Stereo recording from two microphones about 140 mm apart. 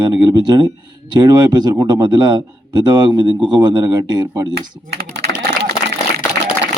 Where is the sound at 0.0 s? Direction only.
35° right (ahead or behind).